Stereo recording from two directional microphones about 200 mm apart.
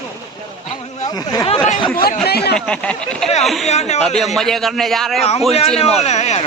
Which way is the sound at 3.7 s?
35° left (ahead or behind).